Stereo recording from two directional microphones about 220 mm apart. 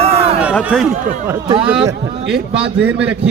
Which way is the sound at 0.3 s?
5° right (ahead or behind).